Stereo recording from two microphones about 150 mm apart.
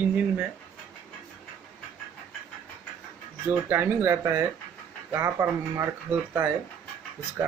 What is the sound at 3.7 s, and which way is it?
Speech, 15° right (ahead or behind).